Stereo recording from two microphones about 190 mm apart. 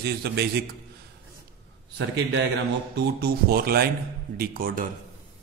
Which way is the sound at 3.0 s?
55° right (ahead or behind).